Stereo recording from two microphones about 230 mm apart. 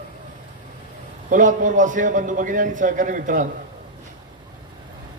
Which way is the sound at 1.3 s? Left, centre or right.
Right.